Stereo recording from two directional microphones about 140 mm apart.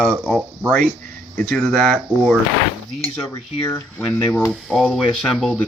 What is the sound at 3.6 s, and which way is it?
Speech, 15° left (ahead or behind).